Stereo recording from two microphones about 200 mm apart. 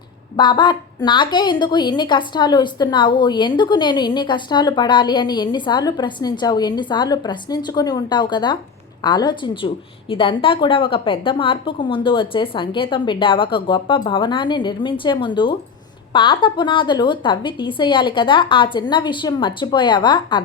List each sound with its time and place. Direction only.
0.3 s speech: 20° left (ahead or behind)